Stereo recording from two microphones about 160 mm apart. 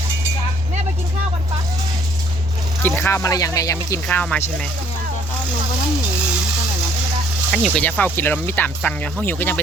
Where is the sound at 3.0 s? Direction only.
20° left (ahead or behind).